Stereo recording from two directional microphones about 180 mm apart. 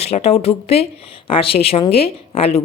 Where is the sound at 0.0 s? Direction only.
35° left (ahead or behind).